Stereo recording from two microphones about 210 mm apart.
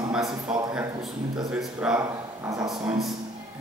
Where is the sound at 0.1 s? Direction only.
5° right (ahead or behind).